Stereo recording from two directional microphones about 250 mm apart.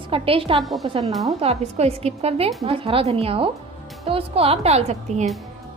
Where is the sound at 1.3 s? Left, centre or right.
Right.